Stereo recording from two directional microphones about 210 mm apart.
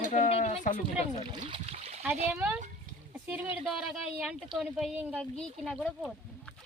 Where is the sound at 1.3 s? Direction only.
25° right (ahead or behind).